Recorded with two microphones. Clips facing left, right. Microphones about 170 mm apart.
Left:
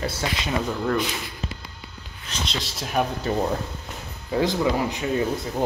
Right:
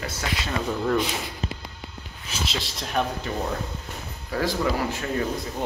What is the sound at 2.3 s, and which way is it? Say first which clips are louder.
Speech: even; centre (ahead or behind).